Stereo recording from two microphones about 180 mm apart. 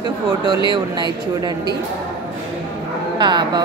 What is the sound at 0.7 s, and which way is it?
Speech, 25° right (ahead or behind).